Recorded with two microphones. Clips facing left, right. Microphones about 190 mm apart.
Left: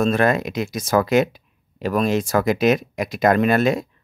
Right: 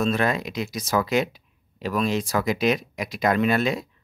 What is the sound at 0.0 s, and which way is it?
Speech, 50° left (ahead or behind).